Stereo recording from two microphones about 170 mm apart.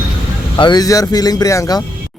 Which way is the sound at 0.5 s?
25° left (ahead or behind).